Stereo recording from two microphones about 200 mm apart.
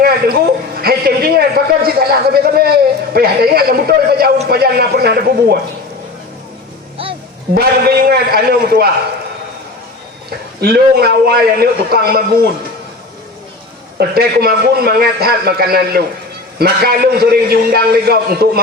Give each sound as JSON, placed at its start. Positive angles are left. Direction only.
{"t": 0.0, "sound": "a sound", "side_deg": -50}
{"t": 4.4, "sound": "a man's voice", "side_deg": -50}
{"t": 6.9, "sound": "music", "side_deg": -25}
{"t": 7.5, "sound": "a man's voice", "side_deg": -50}
{"t": 10.6, "sound": "a man's voice", "side_deg": -50}
{"t": 14.1, "sound": "a man's voice", "side_deg": -50}